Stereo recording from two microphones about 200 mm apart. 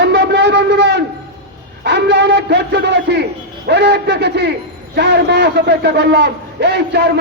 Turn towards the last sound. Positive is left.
turn(degrees=-55)  # may be behind; listen again after turning